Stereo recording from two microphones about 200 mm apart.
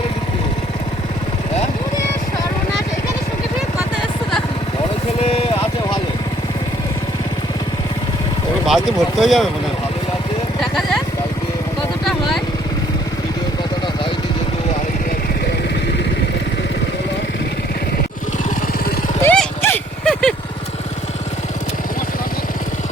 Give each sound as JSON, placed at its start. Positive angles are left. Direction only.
{"t": 5.2, "sound": "vehicle", "side_deg": 30}
{"t": 8.6, "sound": "speech", "side_deg": 0}
{"t": 19.2, "sound": "a sound", "side_deg": 10}